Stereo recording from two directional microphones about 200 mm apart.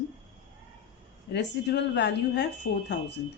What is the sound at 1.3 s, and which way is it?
Speech, 60° left (ahead or behind).